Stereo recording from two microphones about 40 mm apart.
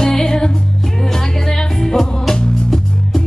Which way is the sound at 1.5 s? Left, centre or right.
Centre.